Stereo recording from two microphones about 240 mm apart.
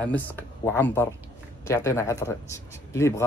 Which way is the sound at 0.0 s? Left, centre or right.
Centre.